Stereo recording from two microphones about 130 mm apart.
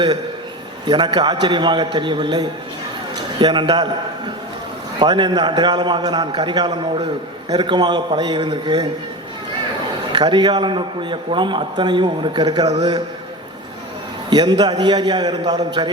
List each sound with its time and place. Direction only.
0.9 s a man's voice: 35° right (ahead or behind)
4.9 s a man's voice: 35° right (ahead or behind)
10.1 s a man's voice: 35° right (ahead or behind)
14.3 s a man's voice: 35° right (ahead or behind)